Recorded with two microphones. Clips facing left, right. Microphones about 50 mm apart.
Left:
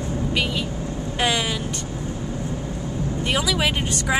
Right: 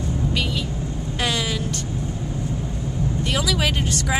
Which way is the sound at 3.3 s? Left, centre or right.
Centre.